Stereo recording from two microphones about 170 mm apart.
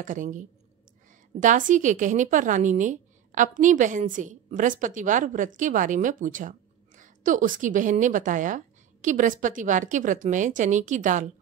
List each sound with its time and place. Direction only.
0.0 s a woman's voice: 50° right (ahead or behind)